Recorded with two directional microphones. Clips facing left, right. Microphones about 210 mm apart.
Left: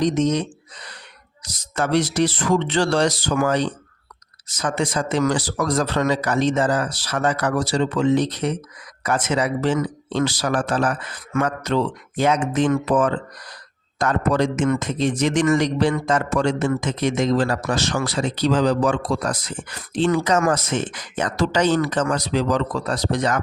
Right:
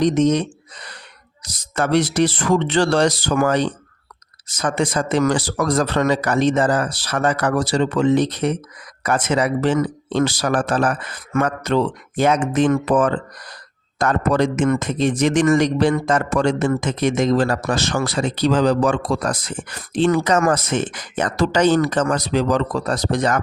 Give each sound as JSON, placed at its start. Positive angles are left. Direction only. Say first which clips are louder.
{"t": 0.0, "sound": "a man's voice", "louder": "right 3 dB", "side_deg": -60}